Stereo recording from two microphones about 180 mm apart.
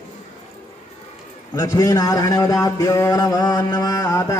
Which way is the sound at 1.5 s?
20° left (ahead or behind).